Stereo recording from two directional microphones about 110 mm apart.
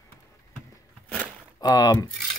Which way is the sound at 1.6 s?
35° left (ahead or behind).